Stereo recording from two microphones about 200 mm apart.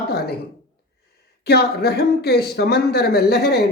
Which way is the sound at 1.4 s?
55° left (ahead or behind).